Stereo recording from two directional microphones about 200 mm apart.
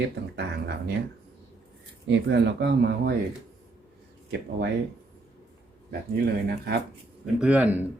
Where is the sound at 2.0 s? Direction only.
60° right (ahead or behind).